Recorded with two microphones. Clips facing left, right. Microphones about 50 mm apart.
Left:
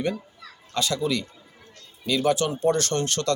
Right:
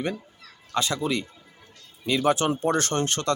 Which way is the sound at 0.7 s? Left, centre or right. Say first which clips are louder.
Even; right.